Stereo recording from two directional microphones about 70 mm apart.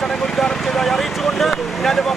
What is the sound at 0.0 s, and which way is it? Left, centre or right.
Vehicle, centre.